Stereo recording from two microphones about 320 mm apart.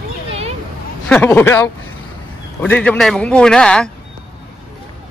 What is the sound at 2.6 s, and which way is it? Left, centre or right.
A man's voice, centre.